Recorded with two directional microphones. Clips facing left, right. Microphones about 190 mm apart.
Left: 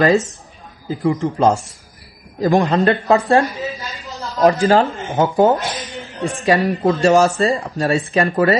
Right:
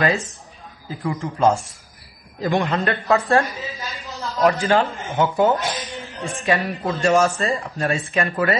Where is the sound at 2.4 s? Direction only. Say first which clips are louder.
Left 6 dB; 40° left (ahead or behind).